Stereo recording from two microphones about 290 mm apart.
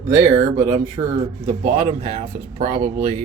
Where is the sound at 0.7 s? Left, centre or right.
Right.